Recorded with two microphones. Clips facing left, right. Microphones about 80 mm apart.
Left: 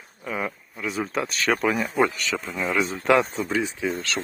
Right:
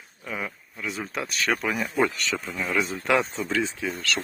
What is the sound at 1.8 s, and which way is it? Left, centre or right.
Speech, left.